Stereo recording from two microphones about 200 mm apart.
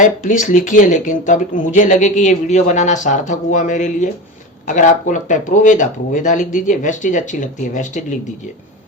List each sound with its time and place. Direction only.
0.0 s speech: 40° left (ahead or behind)